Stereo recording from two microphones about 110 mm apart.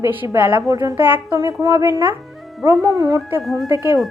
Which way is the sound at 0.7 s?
30° right (ahead or behind).